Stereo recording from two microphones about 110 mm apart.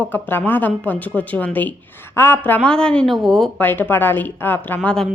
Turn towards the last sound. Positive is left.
turn(degrees=10)  # may be behind; listen again after turning